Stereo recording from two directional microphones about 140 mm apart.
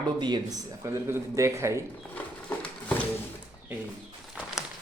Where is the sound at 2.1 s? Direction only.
10° left (ahead or behind).